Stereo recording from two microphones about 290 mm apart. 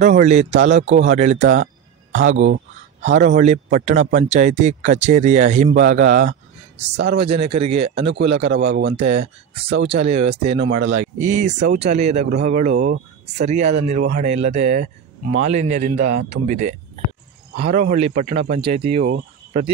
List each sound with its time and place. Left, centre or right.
0.0 s a man's voice: right
1.4 s a man's voice: right